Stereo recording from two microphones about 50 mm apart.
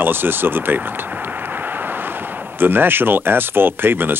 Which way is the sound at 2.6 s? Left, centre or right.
Right.